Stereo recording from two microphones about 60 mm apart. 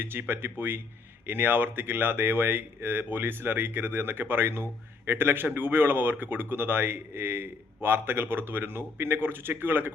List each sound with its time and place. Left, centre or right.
0.0 s a man's voice: right